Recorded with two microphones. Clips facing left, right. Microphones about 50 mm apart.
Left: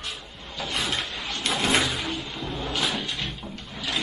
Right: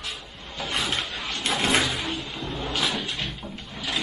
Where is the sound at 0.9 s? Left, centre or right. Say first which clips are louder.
Right 1 dB; right.